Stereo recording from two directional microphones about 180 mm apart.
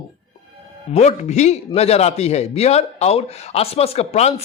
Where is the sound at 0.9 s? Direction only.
40° left (ahead or behind).